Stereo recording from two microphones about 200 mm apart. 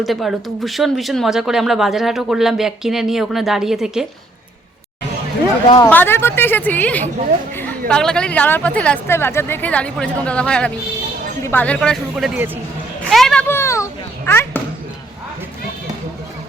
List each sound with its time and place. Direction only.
0.0 s speech: centre (ahead or behind)
5.6 s a woman's voice: 20° left (ahead or behind); by 12.5 s centre (ahead or behind)
13.1 s children playing: centre (ahead or behind)